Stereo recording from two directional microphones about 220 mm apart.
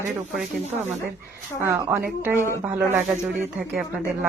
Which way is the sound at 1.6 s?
15° right (ahead or behind).